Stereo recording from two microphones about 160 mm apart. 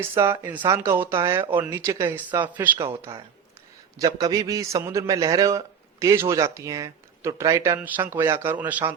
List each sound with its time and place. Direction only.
0.0 s a man's voice: 15° right (ahead or behind)